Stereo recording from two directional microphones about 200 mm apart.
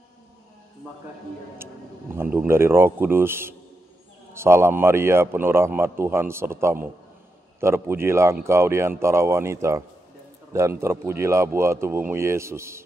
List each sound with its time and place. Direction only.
2.1 s speech: 10° right (ahead or behind)